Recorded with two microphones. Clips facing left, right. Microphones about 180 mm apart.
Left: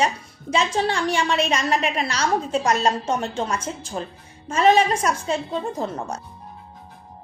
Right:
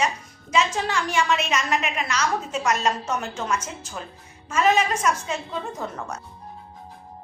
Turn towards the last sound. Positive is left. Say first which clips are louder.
# left 5 dB
turn(degrees=30)  # may be behind; listen again after turning